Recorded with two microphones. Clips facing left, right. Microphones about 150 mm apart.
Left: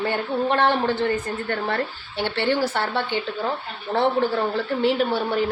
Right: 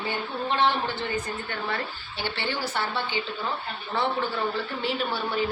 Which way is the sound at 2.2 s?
65° left (ahead or behind).